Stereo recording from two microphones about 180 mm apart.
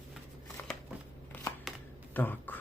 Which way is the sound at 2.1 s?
10° left (ahead or behind).